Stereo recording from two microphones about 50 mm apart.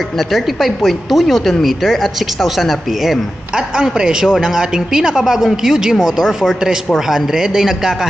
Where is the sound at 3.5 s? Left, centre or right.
Centre.